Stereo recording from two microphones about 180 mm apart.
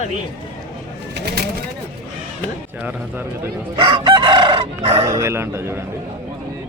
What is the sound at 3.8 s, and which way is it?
Speech, 30° right (ahead or behind).